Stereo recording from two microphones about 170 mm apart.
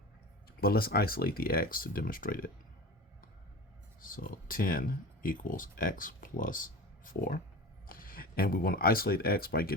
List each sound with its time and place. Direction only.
0.6 s speech: 60° left (ahead or behind)
4.0 s speech: 55° left (ahead or behind)